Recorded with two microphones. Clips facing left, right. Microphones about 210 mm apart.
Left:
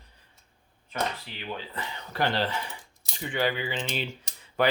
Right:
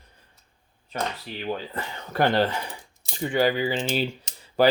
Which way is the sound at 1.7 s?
50° right (ahead or behind).